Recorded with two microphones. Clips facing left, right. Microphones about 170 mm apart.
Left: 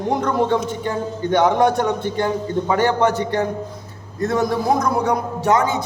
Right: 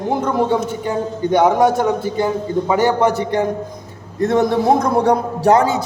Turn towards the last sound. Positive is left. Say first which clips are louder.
# right 4 dB
turn(degrees=-35)  # may be behind; listen again after turning